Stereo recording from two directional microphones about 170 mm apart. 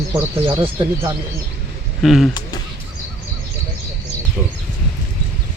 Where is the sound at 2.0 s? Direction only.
Centre (ahead or behind).